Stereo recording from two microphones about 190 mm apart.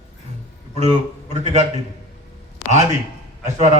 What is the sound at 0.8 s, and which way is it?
Speech, 35° right (ahead or behind).